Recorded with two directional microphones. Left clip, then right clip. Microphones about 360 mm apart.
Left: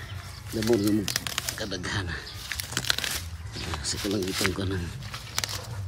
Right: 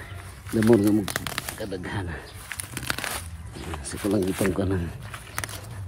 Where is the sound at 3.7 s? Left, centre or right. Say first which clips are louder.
Right 3 dB; centre.